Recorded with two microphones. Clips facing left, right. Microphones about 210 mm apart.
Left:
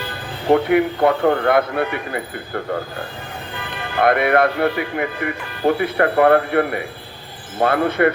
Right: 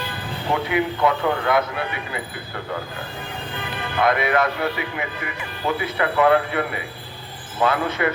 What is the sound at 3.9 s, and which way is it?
Speech, 55° left (ahead or behind).